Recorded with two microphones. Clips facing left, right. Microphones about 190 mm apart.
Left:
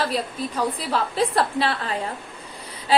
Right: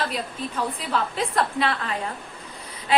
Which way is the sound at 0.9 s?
35° left (ahead or behind).